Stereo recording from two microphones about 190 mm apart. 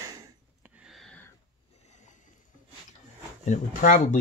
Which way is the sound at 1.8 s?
40° left (ahead or behind).